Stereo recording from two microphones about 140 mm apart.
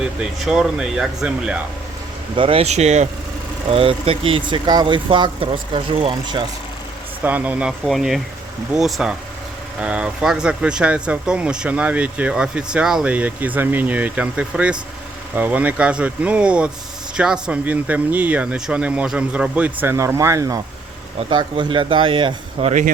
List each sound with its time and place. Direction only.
0.0 s speech: 5° right (ahead or behind)
2.3 s speech: 40° right (ahead or behind)
3.7 s speech: 40° right (ahead or behind)
7.3 s speech: 10° right (ahead or behind)
21.2 s speech: 35° right (ahead or behind)